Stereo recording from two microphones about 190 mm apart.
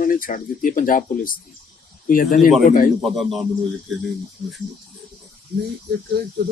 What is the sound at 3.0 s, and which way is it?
Speech, centre (ahead or behind).